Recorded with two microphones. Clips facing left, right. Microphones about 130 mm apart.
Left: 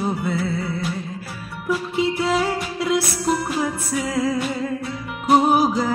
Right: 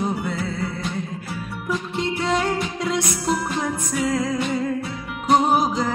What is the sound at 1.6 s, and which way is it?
Music, 5° left (ahead or behind).